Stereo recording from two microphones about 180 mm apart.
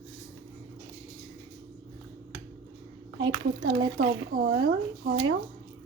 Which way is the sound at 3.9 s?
50° right (ahead or behind).